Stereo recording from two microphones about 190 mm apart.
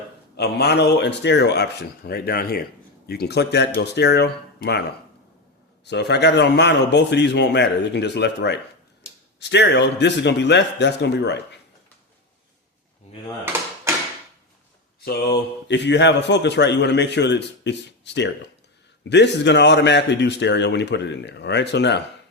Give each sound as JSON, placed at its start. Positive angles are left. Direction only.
{"t": 0.3, "sound": "a man's voice", "side_deg": 60}
{"t": 5.8, "sound": "a man's voice", "side_deg": 60}
{"t": 15.0, "sound": "a man's voice", "side_deg": 60}